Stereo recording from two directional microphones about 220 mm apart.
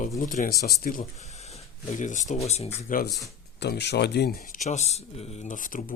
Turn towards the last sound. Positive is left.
turn(degrees=35)  # may be behind; listen again after turning